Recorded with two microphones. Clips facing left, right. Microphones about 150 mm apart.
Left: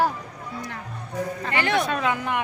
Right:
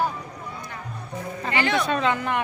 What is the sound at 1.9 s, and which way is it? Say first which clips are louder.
Speech: right 2 dB; 5° left (ahead or behind).